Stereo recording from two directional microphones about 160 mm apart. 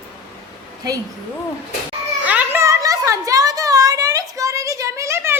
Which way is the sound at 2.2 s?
10° right (ahead or behind).